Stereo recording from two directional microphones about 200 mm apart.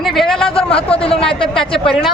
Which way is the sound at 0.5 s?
25° left (ahead or behind).